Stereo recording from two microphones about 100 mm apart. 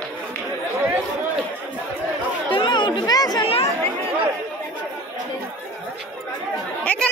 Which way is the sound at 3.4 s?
75° left (ahead or behind).